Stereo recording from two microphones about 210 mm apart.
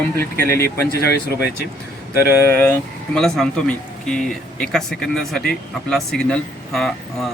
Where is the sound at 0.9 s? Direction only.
50° left (ahead or behind).